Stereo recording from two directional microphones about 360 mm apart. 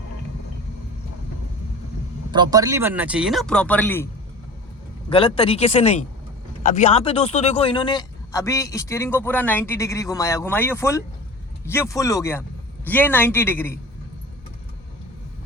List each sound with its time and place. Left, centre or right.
2.3 s speech: centre